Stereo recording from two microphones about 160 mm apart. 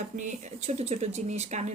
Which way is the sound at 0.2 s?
50° right (ahead or behind).